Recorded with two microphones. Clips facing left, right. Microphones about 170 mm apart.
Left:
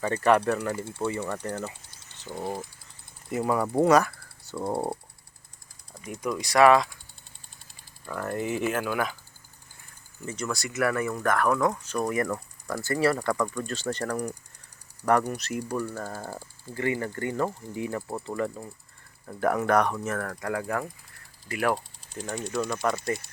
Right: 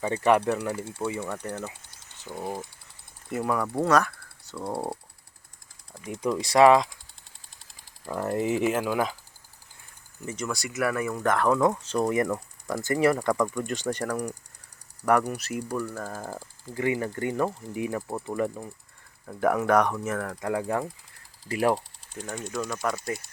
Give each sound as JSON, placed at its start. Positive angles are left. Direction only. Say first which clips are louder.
{"t": 0.0, "sound": "speech", "louder": "even", "side_deg": -10}
{"t": 3.7, "sound": "speech", "louder": "left 4 dB", "side_deg": 15}
{"t": 6.1, "sound": "speech", "louder": "right 3 dB", "side_deg": -30}
{"t": 8.0, "sound": "speech", "louder": "right 3 dB", "side_deg": -30}
{"t": 10.2, "sound": "speech", "louder": "even", "side_deg": -15}
{"t": 13.1, "sound": "speech", "louder": "right 2 dB", "side_deg": -5}
{"t": 13.5, "sound": "speech", "louder": "right 2 dB", "side_deg": -15}
{"t": 21.4, "sound": "speech", "louder": "right 3 dB", "side_deg": -30}
{"t": 22.5, "sound": "speech", "louder": "left 2 dB", "side_deg": -10}